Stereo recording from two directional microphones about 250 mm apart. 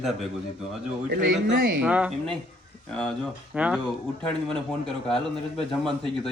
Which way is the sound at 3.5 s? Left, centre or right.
Centre.